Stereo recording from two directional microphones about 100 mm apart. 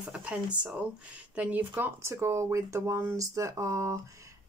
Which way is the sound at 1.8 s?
25° right (ahead or behind).